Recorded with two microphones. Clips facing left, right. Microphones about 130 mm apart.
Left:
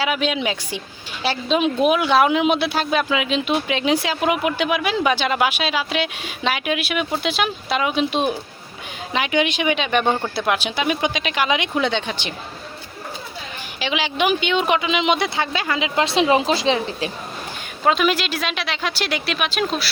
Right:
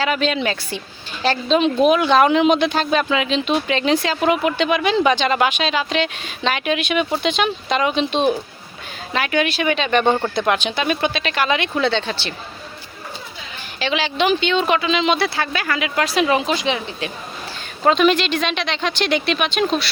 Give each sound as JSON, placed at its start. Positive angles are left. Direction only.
{"t": 0.0, "sound": "speech", "side_deg": 10}
{"t": 13.7, "sound": "speech", "side_deg": 15}
{"t": 17.8, "sound": "speech", "side_deg": 5}